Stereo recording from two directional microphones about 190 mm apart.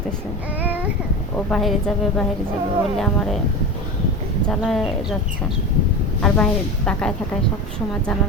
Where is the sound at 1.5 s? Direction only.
Centre (ahead or behind).